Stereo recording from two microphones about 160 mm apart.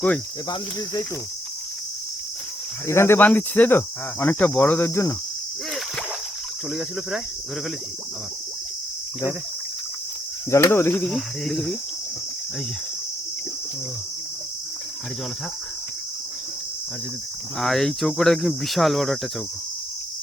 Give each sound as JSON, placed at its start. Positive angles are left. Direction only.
{"t": 0.5, "sound": "cricket", "side_deg": 25}
{"t": 2.8, "sound": "cricket", "side_deg": 15}
{"t": 6.7, "sound": "speech", "side_deg": 0}
{"t": 10.5, "sound": "cricket", "side_deg": 15}
{"t": 17.6, "sound": "speech", "side_deg": 0}